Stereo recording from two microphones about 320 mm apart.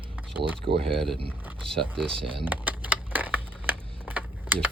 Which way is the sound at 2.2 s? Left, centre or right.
Centre.